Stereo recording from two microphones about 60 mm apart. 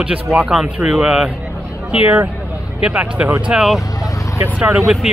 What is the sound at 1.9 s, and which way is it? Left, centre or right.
Speech, right.